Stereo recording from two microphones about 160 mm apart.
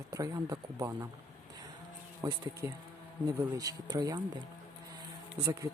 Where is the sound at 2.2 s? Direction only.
15° right (ahead or behind).